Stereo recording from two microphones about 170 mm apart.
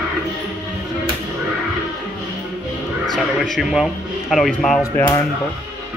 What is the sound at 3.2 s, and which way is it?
A man's voice, centre (ahead or behind).